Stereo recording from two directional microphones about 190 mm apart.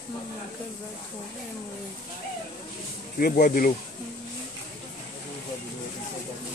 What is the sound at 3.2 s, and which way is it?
Speech, 50° left (ahead or behind).